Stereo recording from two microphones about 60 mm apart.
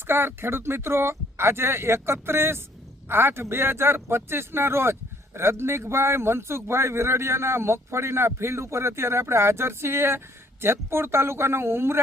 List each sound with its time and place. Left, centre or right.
0.1 s speech: right